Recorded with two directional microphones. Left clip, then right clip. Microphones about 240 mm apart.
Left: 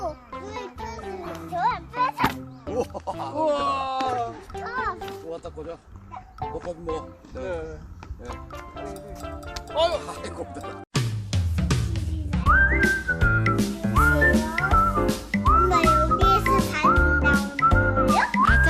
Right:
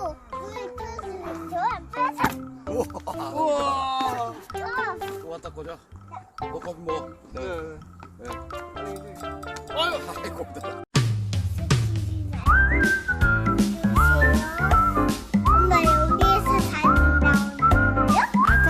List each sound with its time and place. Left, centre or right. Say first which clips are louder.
0.0 s music: even; centre
3.4 s music: even; right
8.3 s music: right 4 dB; centre
9.7 s music: left 3 dB; right
10.6 s music: right 5 dB; centre